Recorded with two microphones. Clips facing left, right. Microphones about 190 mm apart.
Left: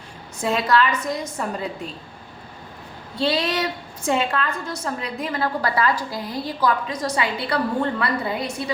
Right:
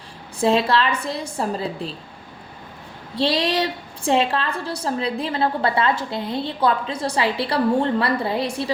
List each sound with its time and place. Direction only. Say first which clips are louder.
0.3 s a woman's voice: right 2 dB; 30° right (ahead or behind)
3.2 s a woman's voice: right 2 dB; 30° right (ahead or behind)